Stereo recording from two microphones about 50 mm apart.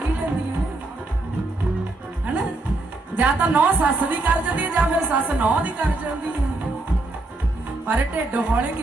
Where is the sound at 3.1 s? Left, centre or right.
Right.